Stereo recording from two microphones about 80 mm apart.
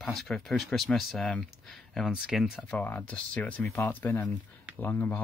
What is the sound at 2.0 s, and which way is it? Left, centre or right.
Speech, centre.